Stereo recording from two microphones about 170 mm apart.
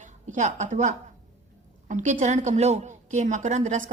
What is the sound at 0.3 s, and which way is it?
A woman's voice, 45° right (ahead or behind).